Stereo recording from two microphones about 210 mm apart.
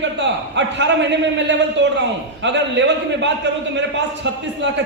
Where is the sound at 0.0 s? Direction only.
55° right (ahead or behind).